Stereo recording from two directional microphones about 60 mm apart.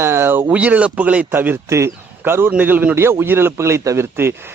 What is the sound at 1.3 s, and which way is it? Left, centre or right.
Speech, right.